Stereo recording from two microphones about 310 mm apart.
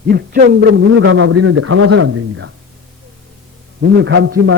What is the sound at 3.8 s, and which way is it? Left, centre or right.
Speech, right.